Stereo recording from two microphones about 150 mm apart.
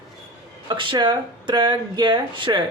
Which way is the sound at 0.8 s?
30° right (ahead or behind).